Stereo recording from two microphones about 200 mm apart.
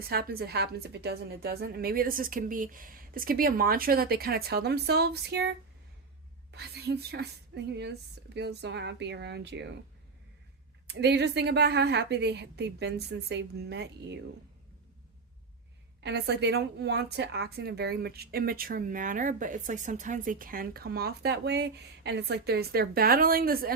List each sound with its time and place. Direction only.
0.1 s a woman's voice: 50° right (ahead or behind)
6.5 s a woman's voice: 55° right (ahead or behind)
10.8 s a woman's voice: 55° right (ahead or behind)
16.0 s a woman's voice: 55° right (ahead or behind)